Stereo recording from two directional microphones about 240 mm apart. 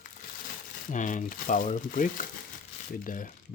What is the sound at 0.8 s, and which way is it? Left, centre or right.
Speech, left.